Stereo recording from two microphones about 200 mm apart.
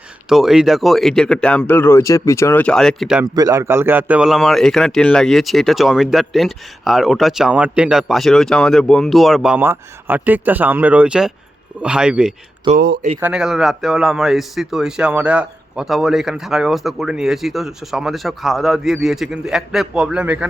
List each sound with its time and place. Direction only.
0.3 s a man's voice: centre (ahead or behind)
3.3 s a man's voice: 15° right (ahead or behind)
12.7 s speech: 30° right (ahead or behind)
13.1 s a man's voice: 5° right (ahead or behind)